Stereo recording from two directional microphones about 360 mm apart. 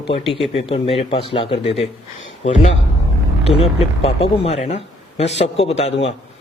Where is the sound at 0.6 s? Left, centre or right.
Centre.